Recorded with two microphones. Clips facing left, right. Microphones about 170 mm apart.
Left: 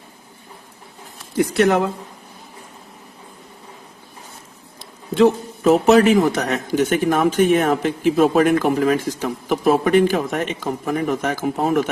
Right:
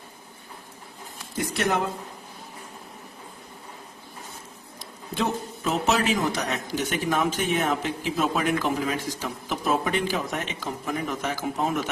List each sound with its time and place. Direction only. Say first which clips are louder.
1.5 s speech: left 9 dB; 70° left (ahead or behind)
5.1 s a man's voice: left 12 dB; 60° left (ahead or behind)